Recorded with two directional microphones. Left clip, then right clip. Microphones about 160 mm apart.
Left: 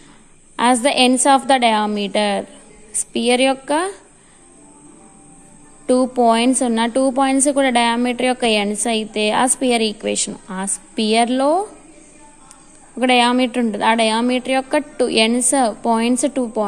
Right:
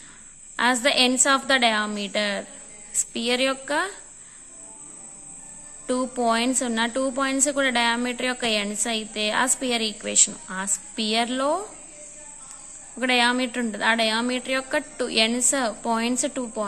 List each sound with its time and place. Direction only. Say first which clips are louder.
0.6 s a woman's voice: left 5 dB; 25° left (ahead or behind)
5.9 s a woman's voice: left 9 dB; 25° left (ahead or behind)
13.0 s a woman's voice: left 6 dB; 25° left (ahead or behind)